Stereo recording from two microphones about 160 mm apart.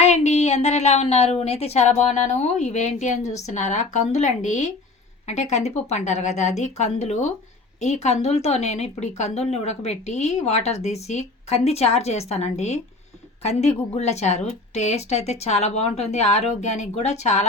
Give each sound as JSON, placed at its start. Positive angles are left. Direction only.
{"t": 0.0, "sound": "a woman's voice", "side_deg": 45}